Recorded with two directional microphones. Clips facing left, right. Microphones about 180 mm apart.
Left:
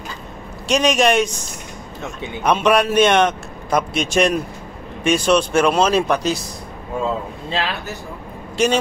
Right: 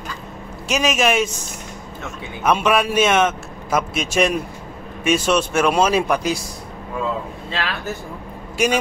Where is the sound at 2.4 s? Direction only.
Centre (ahead or behind).